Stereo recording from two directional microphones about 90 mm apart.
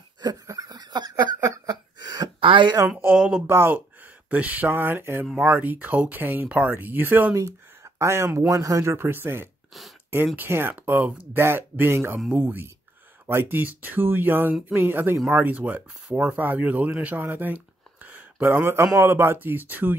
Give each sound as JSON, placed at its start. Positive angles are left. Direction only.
{"t": 0.2, "sound": "laughter", "side_deg": -45}
{"t": 1.4, "sound": "a sound", "side_deg": -40}
{"t": 2.4, "sound": "speech", "side_deg": -70}
{"t": 3.2, "sound": "speech", "side_deg": -10}
{"t": 3.4, "sound": "speech", "side_deg": -25}
{"t": 5.2, "sound": "speech", "side_deg": -10}
{"t": 5.5, "sound": "speech", "side_deg": -20}
{"t": 7.3, "sound": "speech", "side_deg": -35}
{"t": 8.5, "sound": "speech", "side_deg": -40}
{"t": 8.9, "sound": "speech", "side_deg": -25}
{"t": 18.0, "sound": "a sound", "side_deg": -15}
{"t": 18.9, "sound": "speech", "side_deg": -30}